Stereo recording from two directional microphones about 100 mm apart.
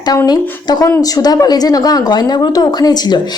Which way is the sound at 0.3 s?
40° left (ahead or behind).